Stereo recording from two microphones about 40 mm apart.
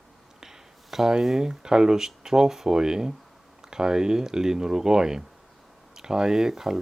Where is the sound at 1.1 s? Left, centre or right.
Centre.